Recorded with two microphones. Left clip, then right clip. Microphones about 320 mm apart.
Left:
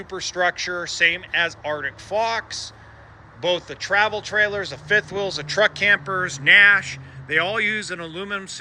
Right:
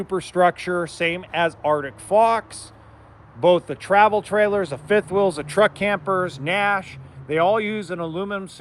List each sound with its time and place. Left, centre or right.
0.1 s speech: right